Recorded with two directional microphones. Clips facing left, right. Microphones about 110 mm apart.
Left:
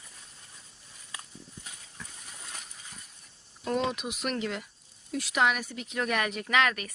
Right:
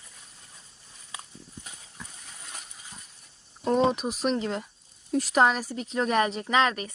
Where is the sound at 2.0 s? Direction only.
15° right (ahead or behind).